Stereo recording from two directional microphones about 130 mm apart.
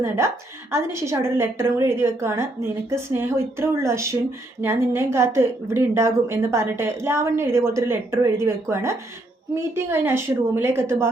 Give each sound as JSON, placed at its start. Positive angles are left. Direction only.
{"t": 0.7, "sound": "speech", "side_deg": -20}